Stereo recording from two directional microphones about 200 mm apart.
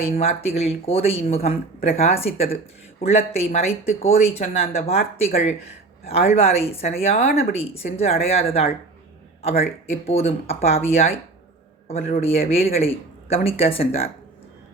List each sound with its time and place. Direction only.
0.2 s a man's voice: 30° left (ahead or behind)